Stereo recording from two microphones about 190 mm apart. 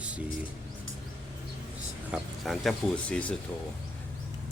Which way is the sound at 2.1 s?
Centre (ahead or behind).